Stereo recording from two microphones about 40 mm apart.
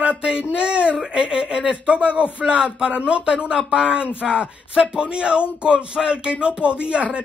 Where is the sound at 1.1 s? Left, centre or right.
Right.